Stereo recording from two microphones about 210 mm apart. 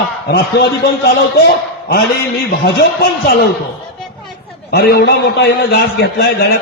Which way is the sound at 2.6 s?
50° left (ahead or behind).